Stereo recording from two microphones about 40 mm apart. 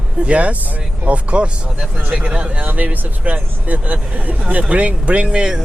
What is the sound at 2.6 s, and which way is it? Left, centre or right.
Speech, right.